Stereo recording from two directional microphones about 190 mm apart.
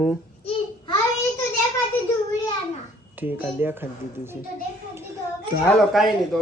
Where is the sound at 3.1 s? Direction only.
10° right (ahead or behind).